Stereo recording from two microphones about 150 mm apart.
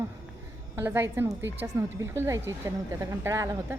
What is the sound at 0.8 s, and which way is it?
A woman's voice, 15° right (ahead or behind).